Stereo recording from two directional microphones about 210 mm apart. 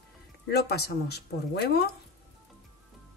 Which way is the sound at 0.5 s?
50° left (ahead or behind).